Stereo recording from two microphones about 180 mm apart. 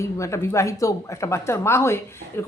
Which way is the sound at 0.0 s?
15° left (ahead or behind).